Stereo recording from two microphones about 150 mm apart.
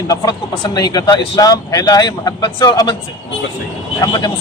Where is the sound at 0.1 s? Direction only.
25° left (ahead or behind).